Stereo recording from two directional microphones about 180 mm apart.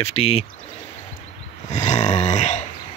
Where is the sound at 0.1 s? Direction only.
35° left (ahead or behind).